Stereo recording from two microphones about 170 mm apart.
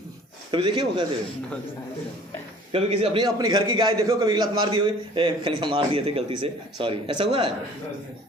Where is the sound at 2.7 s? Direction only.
35° right (ahead or behind).